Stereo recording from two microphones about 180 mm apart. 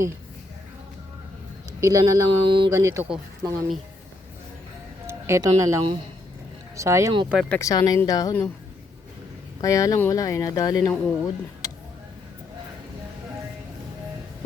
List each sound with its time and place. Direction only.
1.8 s speech: 15° right (ahead or behind)
5.0 s speech: 15° right (ahead or behind)
7.5 s speech: 20° left (ahead or behind)
9.6 s speech: 20° left (ahead or behind)